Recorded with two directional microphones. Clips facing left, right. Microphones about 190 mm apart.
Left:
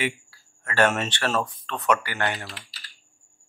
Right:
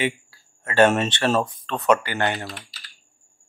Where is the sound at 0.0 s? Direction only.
20° right (ahead or behind).